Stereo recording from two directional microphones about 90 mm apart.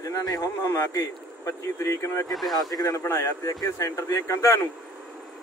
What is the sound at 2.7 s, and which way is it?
Speech, 40° left (ahead or behind).